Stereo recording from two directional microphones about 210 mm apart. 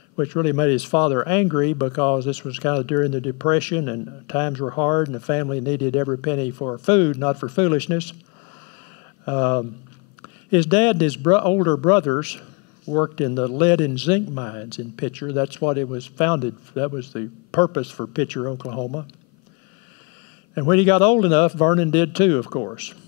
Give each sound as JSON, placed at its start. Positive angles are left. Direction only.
{"t": 0.2, "sound": "speech", "side_deg": 15}
{"t": 9.2, "sound": "speech", "side_deg": 15}
{"t": 20.5, "sound": "speech", "side_deg": 15}